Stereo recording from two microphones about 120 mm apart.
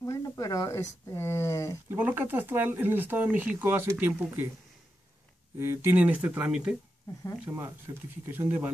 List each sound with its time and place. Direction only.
0.0 s a sound: 25° left (ahead or behind)
1.9 s speech: 15° right (ahead or behind)
5.6 s speech: 20° right (ahead or behind)